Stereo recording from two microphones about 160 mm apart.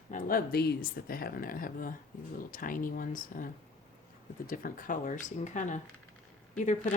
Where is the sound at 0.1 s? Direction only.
60° left (ahead or behind).